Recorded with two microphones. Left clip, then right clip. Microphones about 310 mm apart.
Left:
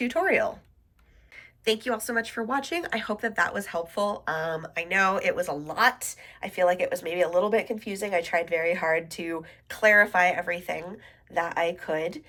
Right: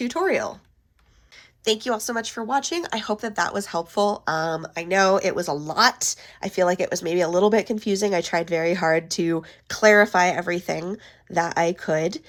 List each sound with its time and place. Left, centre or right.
0.0 s speech: centre
1.6 s speech: centre